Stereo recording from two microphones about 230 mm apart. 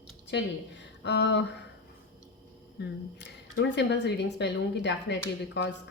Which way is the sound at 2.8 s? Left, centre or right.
Left.